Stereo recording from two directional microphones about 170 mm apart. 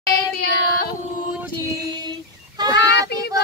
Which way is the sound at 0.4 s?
65° left (ahead or behind).